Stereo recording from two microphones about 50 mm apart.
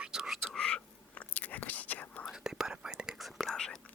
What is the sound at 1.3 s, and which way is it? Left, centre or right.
Whispering, left.